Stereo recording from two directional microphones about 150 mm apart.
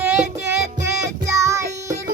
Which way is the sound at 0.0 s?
15° right (ahead or behind).